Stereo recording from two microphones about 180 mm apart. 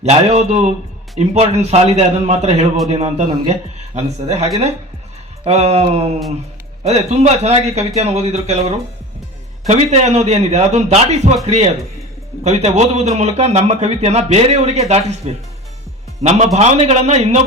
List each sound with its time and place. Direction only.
0.0 s a man's voice: 35° right (ahead or behind)